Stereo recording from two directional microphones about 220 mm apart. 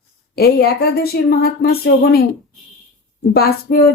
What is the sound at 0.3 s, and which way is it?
Speech, 45° left (ahead or behind).